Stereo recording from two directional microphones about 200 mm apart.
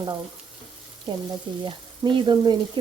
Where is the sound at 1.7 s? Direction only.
25° right (ahead or behind).